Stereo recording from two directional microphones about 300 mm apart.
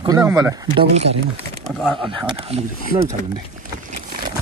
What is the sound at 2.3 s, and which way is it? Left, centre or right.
Speech, centre.